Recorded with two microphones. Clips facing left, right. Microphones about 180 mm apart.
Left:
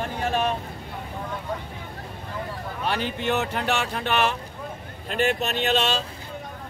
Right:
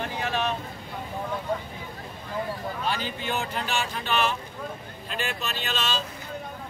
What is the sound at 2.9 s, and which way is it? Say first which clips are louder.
Speech: left 6 dB; 65° left (ahead or behind).